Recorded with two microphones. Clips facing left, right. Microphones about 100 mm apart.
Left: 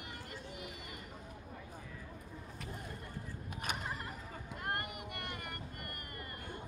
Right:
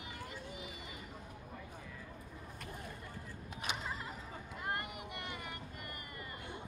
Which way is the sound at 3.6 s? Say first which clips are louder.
Even; 50° left (ahead or behind).